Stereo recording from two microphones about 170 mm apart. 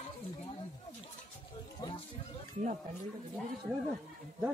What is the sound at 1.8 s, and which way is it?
Music, 25° left (ahead or behind).